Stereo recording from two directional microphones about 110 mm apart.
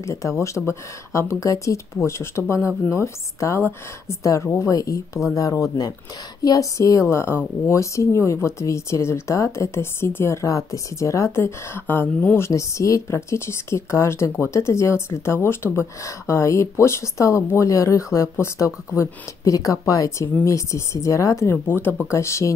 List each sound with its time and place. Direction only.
0.0 s speech: 30° left (ahead or behind)
12.4 s speech: 30° left (ahead or behind)